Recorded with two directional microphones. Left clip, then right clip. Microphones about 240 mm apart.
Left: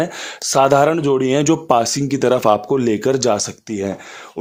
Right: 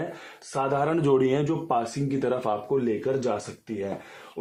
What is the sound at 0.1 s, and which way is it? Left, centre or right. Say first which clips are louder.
Speech: left 15 dB; left.